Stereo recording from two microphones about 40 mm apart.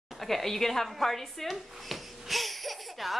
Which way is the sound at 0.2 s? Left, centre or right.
Centre.